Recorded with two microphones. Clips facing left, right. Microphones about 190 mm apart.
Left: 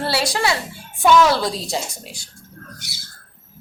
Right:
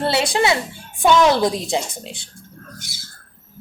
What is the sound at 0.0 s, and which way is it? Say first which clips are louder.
A woman's voice: right 3 dB; 20° right (ahead or behind).